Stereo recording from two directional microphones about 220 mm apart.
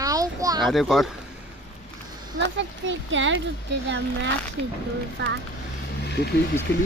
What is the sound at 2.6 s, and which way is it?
Speech, 60° right (ahead or behind).